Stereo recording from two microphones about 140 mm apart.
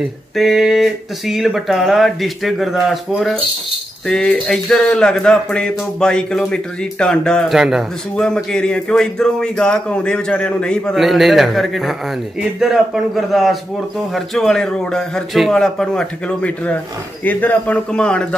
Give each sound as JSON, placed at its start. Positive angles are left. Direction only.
{"t": 0.0, "sound": "a man's voice", "side_deg": 0}